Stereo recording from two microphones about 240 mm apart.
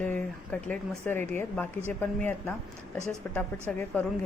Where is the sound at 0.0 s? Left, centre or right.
Centre.